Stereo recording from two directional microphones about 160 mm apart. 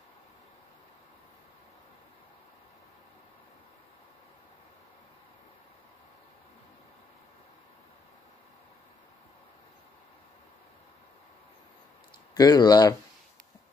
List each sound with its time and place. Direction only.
12.4 s speech: 25° left (ahead or behind)